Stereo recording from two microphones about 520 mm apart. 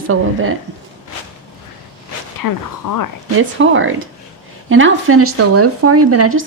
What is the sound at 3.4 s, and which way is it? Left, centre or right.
Speech, right.